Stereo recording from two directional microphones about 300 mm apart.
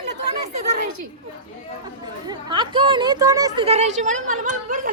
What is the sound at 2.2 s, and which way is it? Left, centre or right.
A woman's voice, centre.